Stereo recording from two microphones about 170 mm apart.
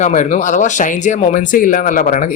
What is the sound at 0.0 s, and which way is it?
Speech, 45° left (ahead or behind).